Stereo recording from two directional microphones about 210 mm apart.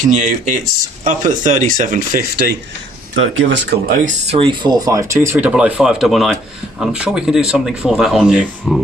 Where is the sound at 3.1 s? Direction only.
65° right (ahead or behind); by 4.1 s 45° right (ahead or behind).